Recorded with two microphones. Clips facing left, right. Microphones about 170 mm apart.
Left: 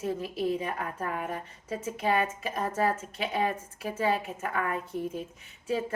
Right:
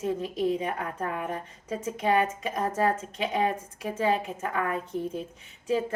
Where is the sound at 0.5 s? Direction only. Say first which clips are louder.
Right 2 dB; 30° right (ahead or behind).